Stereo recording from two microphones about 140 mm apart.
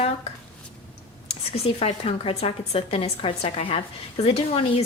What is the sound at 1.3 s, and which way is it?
A woman's voice, 45° left (ahead or behind).